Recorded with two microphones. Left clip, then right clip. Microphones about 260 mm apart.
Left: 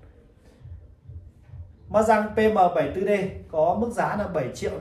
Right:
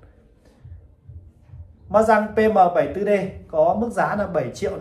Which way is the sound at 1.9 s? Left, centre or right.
Centre.